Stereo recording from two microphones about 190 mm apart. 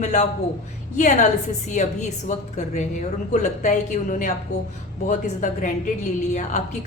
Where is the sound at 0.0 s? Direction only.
40° left (ahead or behind).